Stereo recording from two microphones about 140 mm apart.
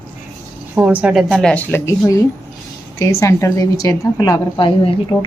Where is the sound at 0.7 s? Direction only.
10° right (ahead or behind).